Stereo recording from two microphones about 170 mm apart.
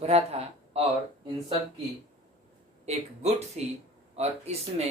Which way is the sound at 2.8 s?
40° right (ahead or behind).